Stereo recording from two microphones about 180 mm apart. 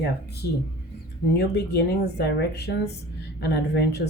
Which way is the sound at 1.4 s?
65° left (ahead or behind).